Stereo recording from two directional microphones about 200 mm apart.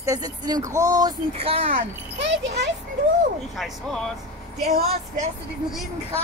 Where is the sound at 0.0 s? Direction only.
15° right (ahead or behind).